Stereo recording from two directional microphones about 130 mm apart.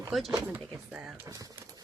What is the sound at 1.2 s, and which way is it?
Speech, 30° right (ahead or behind).